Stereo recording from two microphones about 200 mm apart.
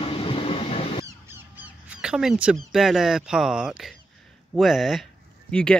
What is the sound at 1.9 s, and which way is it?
Speech, 5° right (ahead or behind).